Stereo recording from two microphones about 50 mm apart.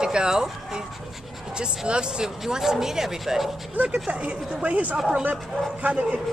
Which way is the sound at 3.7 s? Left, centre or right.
Right.